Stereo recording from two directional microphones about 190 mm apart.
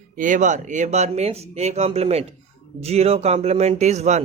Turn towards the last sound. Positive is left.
turn(degrees=-35)  # may be behind; listen again after turning